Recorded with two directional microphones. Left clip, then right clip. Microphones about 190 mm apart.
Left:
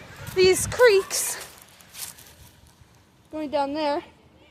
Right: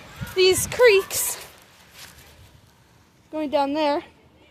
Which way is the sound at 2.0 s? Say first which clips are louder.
Left 4 dB; 65° left (ahead or behind).